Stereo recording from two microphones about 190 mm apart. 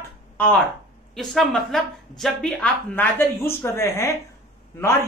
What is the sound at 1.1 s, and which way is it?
Speech, centre (ahead or behind).